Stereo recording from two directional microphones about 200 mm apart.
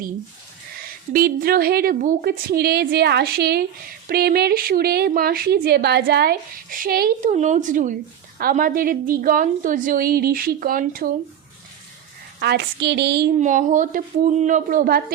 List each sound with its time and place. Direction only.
1.1 s a woman's voice: 50° right (ahead or behind)
12.4 s a woman's voice: 55° right (ahead or behind)
13.4 s speech: 40° right (ahead or behind)